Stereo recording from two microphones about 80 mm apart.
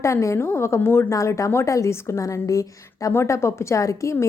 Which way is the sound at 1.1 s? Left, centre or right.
Left.